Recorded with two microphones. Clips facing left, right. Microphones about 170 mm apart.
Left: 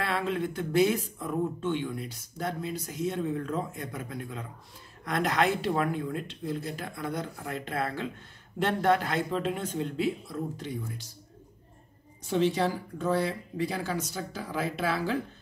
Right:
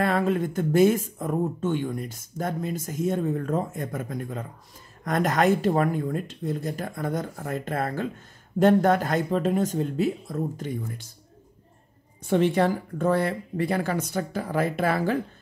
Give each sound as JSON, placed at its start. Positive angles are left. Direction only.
{"t": 0.0, "sound": "speech", "side_deg": -45}
{"t": 12.3, "sound": "speech", "side_deg": -55}